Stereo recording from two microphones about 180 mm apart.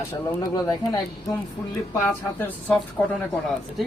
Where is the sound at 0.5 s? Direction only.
20° left (ahead or behind).